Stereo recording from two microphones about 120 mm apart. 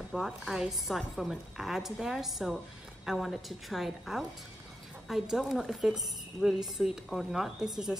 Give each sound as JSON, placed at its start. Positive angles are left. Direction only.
{"t": 0.1, "sound": "a woman's voice", "side_deg": -5}